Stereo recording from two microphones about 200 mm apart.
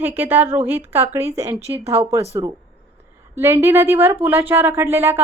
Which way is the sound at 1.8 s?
30° right (ahead or behind).